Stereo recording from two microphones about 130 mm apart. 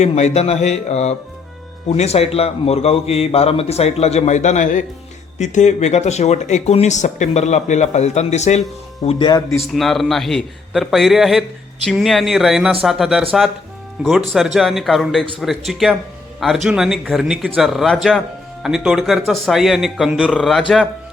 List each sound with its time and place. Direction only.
0.0 s a man's voice: 55° left (ahead or behind)
9.0 s speech: 35° left (ahead or behind)
9.6 s a man's voice: centre (ahead or behind)
20.3 s a man's voice: 5° left (ahead or behind)